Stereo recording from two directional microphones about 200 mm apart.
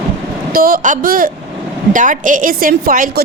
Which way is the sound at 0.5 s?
45° right (ahead or behind).